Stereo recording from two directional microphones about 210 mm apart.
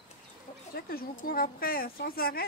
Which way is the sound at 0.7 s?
45° left (ahead or behind).